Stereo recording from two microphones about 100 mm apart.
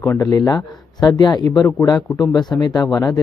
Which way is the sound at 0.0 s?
35° left (ahead or behind).